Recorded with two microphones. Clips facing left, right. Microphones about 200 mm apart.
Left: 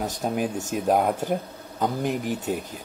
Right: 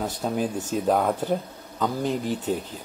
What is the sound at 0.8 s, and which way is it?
Speech, 15° left (ahead or behind).